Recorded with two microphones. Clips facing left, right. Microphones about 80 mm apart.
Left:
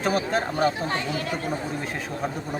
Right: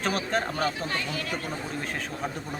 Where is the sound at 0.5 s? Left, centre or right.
Left.